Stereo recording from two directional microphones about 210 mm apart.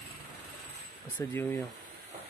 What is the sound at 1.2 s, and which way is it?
Speech, 15° left (ahead or behind).